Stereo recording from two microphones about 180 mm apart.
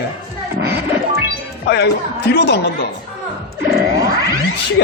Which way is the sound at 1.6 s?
70° left (ahead or behind).